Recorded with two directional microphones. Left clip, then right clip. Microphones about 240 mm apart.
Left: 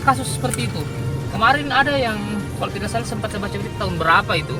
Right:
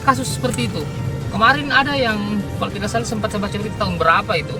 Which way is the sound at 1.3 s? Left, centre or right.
Centre.